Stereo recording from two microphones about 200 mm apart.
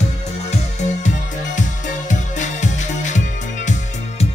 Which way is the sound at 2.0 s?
35° left (ahead or behind).